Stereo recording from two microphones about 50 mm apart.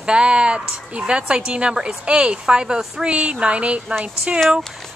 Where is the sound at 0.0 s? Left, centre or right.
Centre.